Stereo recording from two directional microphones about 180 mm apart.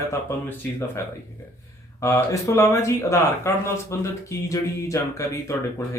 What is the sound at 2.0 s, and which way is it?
Speech, 15° left (ahead or behind).